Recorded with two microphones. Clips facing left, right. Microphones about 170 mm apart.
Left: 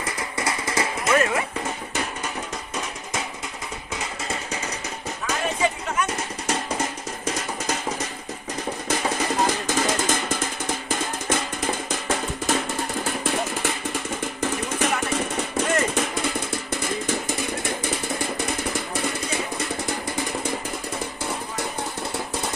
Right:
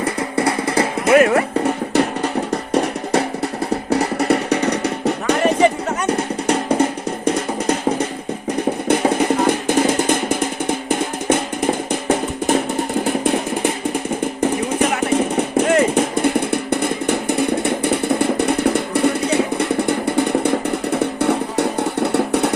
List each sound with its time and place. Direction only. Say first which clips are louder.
0.0 s music: right 9 dB; 60° right (ahead or behind)
8.9 s music: right 9 dB; 60° right (ahead or behind)
13.1 s a sound: right 7 dB; 55° right (ahead or behind)
14.4 s music: right 7 dB; 60° right (ahead or behind)